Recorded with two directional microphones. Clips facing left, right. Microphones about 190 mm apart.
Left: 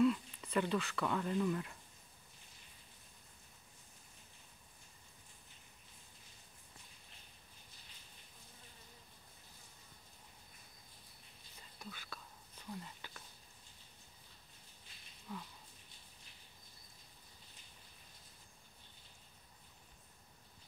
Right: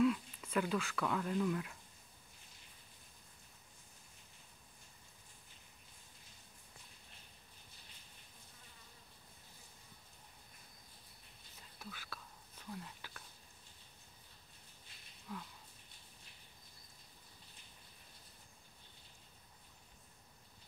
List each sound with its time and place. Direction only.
0.0 s speech: centre (ahead or behind)
11.8 s whispering: 5° right (ahead or behind)
15.3 s a sound: centre (ahead or behind)